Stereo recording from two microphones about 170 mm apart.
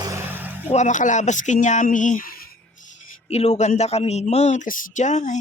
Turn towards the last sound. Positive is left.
turn(degrees=45)  # may be behind; listen again after turning